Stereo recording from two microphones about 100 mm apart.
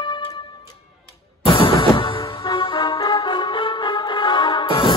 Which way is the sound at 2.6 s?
45° left (ahead or behind).